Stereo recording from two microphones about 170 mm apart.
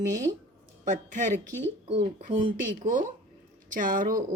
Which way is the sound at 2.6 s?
50° right (ahead or behind).